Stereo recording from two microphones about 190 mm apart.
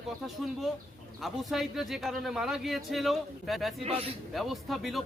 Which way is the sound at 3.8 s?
30° right (ahead or behind).